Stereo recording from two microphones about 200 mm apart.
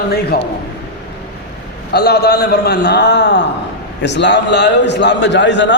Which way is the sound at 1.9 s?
55° left (ahead or behind).